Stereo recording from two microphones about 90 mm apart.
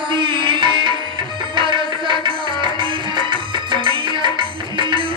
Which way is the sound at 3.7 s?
65° right (ahead or behind).